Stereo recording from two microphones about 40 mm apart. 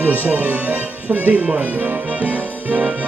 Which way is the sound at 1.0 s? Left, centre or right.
Right.